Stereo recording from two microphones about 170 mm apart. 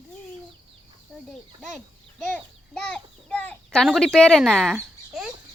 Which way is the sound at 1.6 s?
Centre (ahead or behind).